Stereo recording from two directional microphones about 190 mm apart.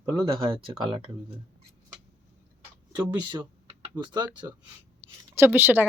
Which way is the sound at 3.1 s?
30° right (ahead or behind).